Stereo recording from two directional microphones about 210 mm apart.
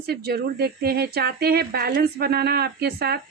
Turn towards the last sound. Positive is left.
turn(degrees=-50)  # may be behind; listen again after turning